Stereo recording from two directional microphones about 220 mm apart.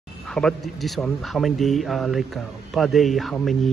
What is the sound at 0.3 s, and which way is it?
A man's voice, centre (ahead or behind).